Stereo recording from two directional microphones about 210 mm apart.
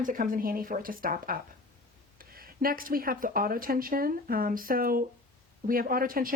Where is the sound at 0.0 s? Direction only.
40° right (ahead or behind).